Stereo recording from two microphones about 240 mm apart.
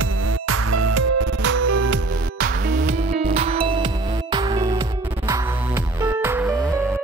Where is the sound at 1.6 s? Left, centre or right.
Right.